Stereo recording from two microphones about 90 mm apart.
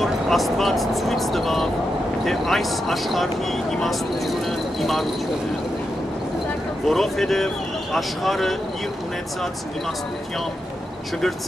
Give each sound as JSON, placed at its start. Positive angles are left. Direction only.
{"t": 0.0, "sound": "speech", "side_deg": 0}
{"t": 6.9, "sound": "speech", "side_deg": 0}